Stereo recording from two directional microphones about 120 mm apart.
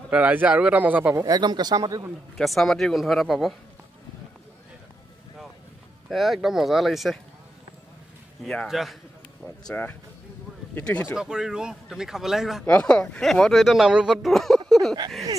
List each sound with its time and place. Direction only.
0.1 s speech: 15° right (ahead or behind)
1.2 s speech: 35° right (ahead or behind)
2.3 s speech: centre (ahead or behind)
6.0 s speech: centre (ahead or behind)
8.6 s speech: centre (ahead or behind)
9.7 s speech: 15° left (ahead or behind)
11.1 s speech: 5° right (ahead or behind)
12.6 s speech: 10° left (ahead or behind)
14.7 s a sound: centre (ahead or behind)